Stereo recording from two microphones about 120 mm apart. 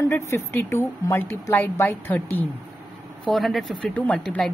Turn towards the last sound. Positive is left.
turn(degrees=5)  # may be behind; listen again after turning